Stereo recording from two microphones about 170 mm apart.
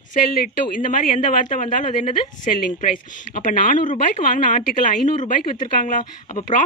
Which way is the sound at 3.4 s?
50° left (ahead or behind).